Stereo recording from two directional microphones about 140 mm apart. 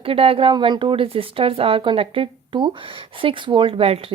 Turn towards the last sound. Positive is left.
turn(degrees=-45)  # may be behind; listen again after turning